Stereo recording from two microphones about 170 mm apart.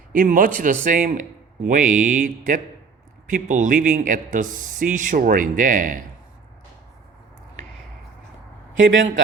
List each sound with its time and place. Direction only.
0.1 s speech: 55° right (ahead or behind)